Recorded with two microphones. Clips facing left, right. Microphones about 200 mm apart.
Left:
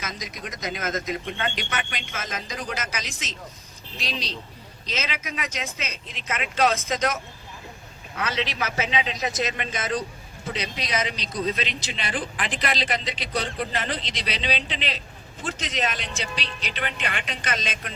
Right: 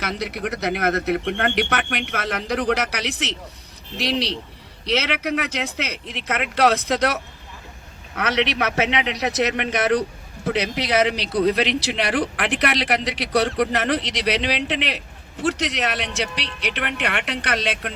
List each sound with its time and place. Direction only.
0.0 s speech: 65° right (ahead or behind)